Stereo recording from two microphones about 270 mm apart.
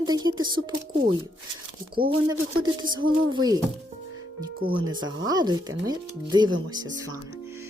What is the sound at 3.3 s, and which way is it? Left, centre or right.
Speech, centre.